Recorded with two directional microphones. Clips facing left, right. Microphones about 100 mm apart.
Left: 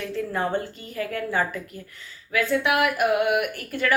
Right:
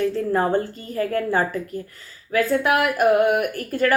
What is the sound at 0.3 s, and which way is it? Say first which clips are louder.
Speech: right 4 dB; 40° right (ahead or behind).